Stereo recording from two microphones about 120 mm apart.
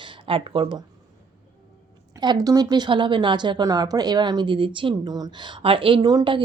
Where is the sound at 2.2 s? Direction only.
35° right (ahead or behind).